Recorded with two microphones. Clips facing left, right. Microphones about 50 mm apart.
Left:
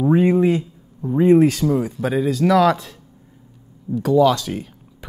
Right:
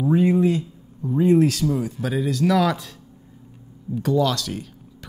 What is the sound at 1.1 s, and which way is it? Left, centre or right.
Speech, left.